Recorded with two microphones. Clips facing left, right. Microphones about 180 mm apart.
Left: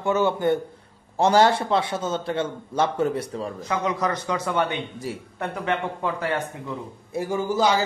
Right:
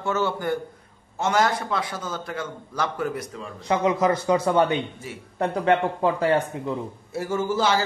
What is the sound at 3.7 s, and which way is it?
A man's voice, 25° right (ahead or behind).